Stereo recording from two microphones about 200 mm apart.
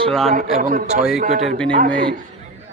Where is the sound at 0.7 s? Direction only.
45° right (ahead or behind).